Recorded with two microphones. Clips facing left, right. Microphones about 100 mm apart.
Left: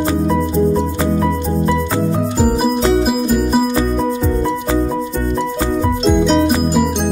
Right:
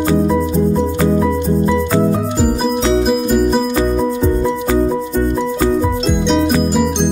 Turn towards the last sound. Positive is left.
turn(degrees=0)  # may be behind; listen again after turning